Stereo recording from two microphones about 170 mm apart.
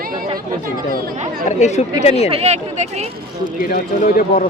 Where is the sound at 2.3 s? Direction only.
40° right (ahead or behind).